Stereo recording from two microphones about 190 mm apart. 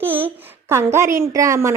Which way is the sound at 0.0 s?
10° right (ahead or behind).